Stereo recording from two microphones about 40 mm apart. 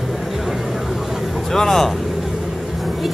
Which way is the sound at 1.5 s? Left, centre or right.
Centre.